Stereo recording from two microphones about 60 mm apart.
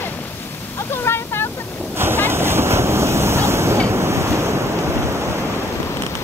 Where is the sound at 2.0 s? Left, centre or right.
Right.